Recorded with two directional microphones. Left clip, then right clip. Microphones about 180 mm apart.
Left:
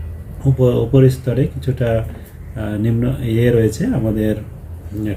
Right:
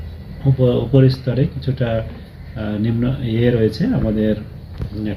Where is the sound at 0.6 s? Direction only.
15° left (ahead or behind).